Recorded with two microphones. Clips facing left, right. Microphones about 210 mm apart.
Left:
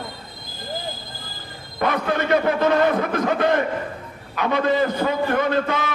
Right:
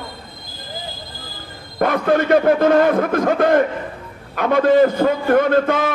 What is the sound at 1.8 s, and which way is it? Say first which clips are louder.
A man's voice: right 6 dB; 50° right (ahead or behind).